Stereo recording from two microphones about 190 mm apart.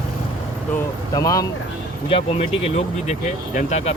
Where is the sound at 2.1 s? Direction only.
30° left (ahead or behind).